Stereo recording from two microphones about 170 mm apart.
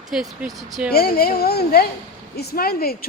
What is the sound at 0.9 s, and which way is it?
Speech, 65° left (ahead or behind).